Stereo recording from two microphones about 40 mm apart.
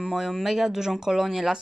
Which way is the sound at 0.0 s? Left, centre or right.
Centre.